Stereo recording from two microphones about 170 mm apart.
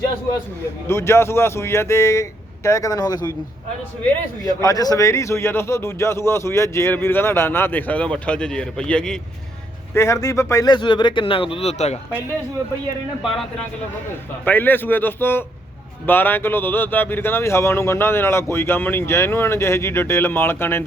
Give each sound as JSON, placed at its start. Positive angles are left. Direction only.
{"t": 0.9, "sound": "a man's voice", "side_deg": 15}
{"t": 4.4, "sound": "a man's voice", "side_deg": 20}
{"t": 9.9, "sound": "speech", "side_deg": 15}
{"t": 14.4, "sound": "a man's voice", "side_deg": 10}